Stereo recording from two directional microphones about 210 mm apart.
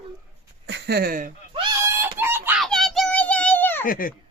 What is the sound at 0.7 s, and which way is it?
Speech, 55° right (ahead or behind).